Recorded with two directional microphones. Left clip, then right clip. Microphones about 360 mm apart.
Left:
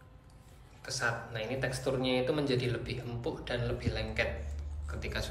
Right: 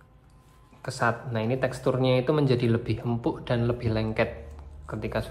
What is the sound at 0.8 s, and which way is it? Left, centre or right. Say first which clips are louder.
Speech: right 7 dB; centre.